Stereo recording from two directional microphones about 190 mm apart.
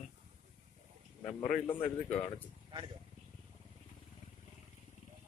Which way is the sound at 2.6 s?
25° right (ahead or behind).